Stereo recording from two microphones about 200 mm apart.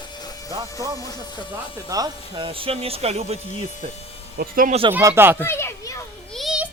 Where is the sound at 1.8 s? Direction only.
20° right (ahead or behind).